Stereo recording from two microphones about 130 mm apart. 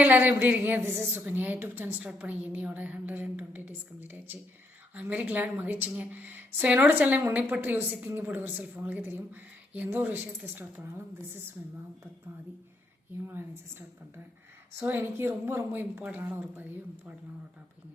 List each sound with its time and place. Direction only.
0.0 s a woman's voice: 15° right (ahead or behind)
13.2 s a woman's voice: 15° right (ahead or behind)